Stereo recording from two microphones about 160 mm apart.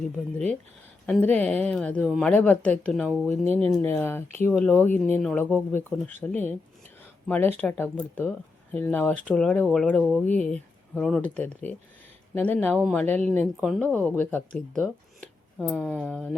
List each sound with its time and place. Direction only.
0.0 s speech: 5° left (ahead or behind)
13.6 s speech: centre (ahead or behind)